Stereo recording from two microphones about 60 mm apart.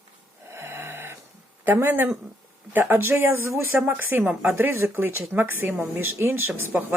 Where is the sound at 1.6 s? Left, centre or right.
Right.